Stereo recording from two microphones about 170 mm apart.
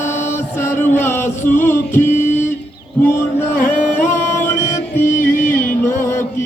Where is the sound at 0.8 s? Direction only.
15° left (ahead or behind).